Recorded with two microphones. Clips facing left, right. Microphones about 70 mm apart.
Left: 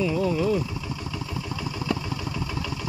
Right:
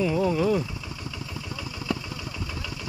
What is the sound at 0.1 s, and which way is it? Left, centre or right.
Vehicle, right.